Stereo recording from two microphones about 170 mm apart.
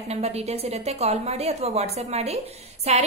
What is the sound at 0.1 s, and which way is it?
A woman's voice, 40° right (ahead or behind).